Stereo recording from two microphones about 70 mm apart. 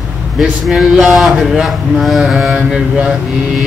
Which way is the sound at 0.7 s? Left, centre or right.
Centre.